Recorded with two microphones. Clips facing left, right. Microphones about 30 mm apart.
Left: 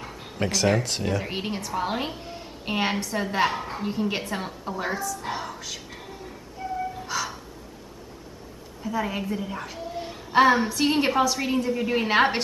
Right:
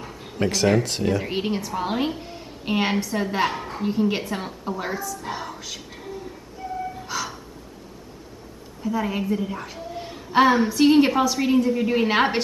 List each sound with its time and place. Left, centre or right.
0.0 s a woman's voice: centre
6.6 s gasp: centre
7.1 s gasp: centre
8.8 s a woman's voice: centre